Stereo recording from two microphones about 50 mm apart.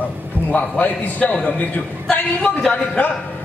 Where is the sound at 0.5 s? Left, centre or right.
Left.